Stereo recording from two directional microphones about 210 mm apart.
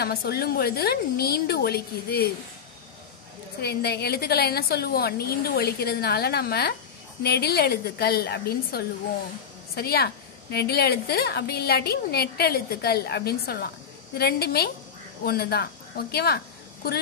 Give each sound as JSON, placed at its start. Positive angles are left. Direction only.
{"t": 0.0, "sound": "a woman's voice", "side_deg": 50}
{"t": 3.6, "sound": "a woman's voice", "side_deg": 50}